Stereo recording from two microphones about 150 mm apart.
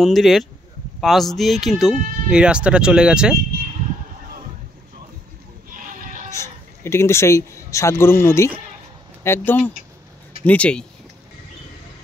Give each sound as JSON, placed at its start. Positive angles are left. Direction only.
{"t": 0.0, "sound": "speech", "side_deg": 0}
{"t": 6.8, "sound": "speech", "side_deg": 15}